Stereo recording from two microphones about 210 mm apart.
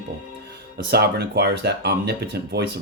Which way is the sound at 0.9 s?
50° right (ahead or behind).